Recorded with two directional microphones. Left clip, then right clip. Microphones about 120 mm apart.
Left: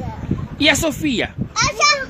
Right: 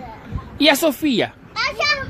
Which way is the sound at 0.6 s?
25° right (ahead or behind).